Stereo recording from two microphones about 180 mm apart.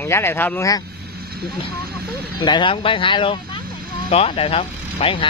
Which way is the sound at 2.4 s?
25° left (ahead or behind).